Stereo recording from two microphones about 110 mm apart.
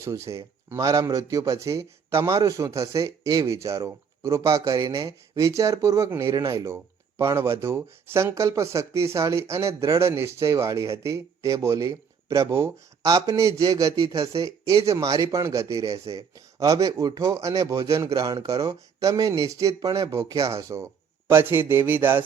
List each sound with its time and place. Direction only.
0.0 s speech: 25° right (ahead or behind)